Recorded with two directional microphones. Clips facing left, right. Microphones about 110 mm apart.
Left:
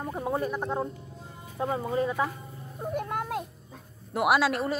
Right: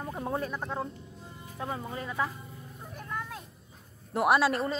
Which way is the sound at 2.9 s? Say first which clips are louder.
Left 8 dB; 60° left (ahead or behind).